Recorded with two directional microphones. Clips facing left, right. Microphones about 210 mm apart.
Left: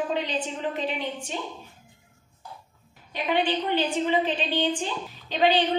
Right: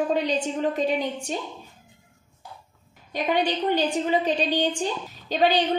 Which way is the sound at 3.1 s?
40° right (ahead or behind).